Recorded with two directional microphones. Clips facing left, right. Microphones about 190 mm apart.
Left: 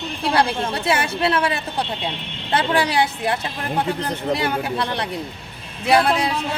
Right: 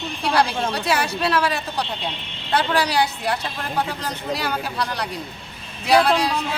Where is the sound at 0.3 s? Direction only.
25° left (ahead or behind).